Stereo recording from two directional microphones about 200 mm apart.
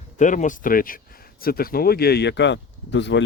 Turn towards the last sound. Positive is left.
turn(degrees=65)  # may be behind; listen again after turning